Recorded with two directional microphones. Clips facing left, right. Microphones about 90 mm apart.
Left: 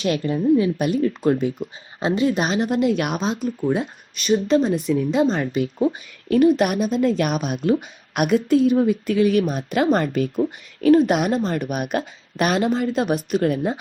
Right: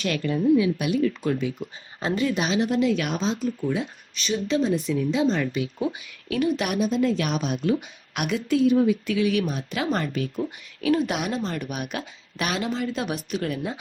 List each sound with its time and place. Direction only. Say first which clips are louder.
0.0 s speech: left 3 dB; 35° left (ahead or behind)